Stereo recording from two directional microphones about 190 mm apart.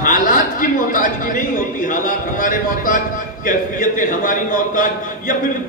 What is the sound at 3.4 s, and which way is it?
A man's voice, 45° left (ahead or behind).